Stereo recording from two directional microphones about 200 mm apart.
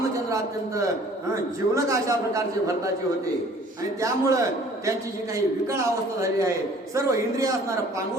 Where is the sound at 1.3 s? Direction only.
15° right (ahead or behind).